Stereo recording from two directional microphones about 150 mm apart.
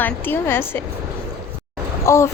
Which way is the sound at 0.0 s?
15° left (ahead or behind).